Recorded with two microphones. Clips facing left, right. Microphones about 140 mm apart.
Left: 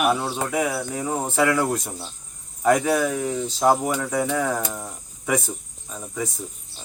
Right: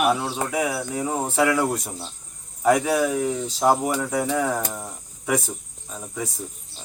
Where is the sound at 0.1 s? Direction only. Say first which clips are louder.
Even; 5° right (ahead or behind).